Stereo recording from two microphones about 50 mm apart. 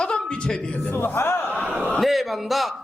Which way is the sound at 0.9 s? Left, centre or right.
Left.